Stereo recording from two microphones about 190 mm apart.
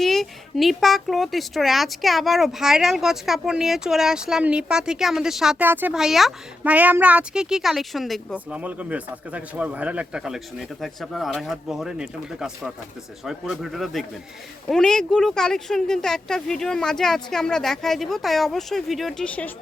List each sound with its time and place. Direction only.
0.0 s speech: centre (ahead or behind)